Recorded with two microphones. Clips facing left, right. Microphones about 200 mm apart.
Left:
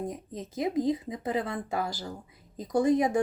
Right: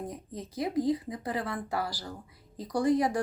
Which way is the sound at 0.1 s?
20° left (ahead or behind).